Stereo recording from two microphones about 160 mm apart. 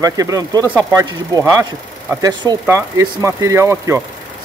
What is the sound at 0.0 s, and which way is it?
Speech, 20° right (ahead or behind).